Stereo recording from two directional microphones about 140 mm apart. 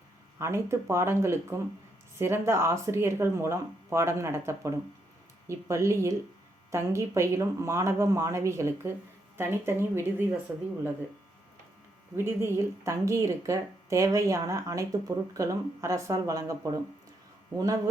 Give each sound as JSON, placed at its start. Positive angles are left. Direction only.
{"t": 0.3, "sound": "speech", "side_deg": -20}
{"t": 12.1, "sound": "speech", "side_deg": -15}